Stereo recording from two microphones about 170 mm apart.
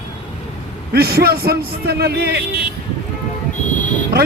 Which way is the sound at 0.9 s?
65° right (ahead or behind).